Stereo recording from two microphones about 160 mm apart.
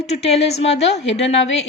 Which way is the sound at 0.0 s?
40° left (ahead or behind).